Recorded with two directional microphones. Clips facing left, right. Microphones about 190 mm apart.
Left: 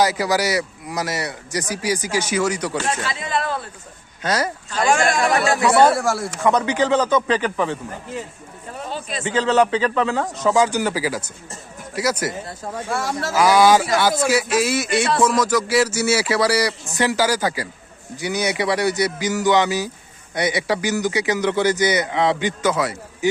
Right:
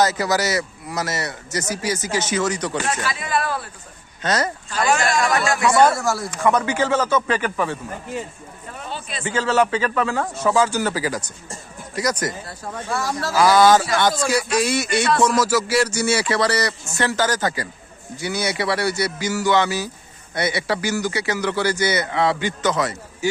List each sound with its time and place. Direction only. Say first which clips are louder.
0.0 s a man's voice: left 1 dB; 10° left (ahead or behind)
2.8 s speech: even; 25° left (ahead or behind)
4.2 s a man's voice: even; 10° left (ahead or behind)
5.9 s speech: left 2 dB; 30° left (ahead or behind)
6.4 s a man's voice: left 1 dB; 15° left (ahead or behind)
8.9 s a sound: left 3 dB; 40° left (ahead or behind)
9.2 s a man's voice: left 2 dB; 20° left (ahead or behind)
12.5 s speech: left 2 dB; 25° left (ahead or behind)
13.4 s a man's voice: even; 10° left (ahead or behind)